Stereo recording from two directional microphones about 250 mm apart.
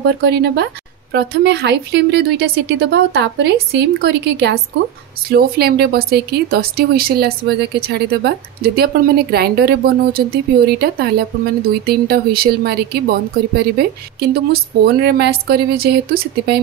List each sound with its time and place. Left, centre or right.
0.2 s speech: right